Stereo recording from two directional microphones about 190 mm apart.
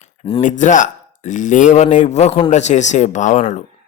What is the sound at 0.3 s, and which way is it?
Speech, 35° left (ahead or behind).